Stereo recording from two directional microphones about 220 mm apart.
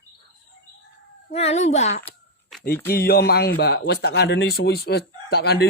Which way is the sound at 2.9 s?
45° left (ahead or behind).